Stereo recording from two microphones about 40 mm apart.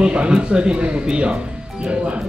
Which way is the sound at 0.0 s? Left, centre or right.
Right.